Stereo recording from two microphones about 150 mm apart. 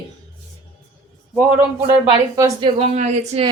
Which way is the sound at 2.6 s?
45° right (ahead or behind).